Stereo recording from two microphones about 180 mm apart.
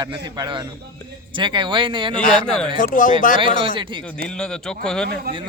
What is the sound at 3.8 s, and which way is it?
Speech, 25° right (ahead or behind).